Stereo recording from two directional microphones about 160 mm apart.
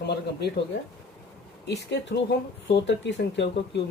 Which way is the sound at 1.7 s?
90° left.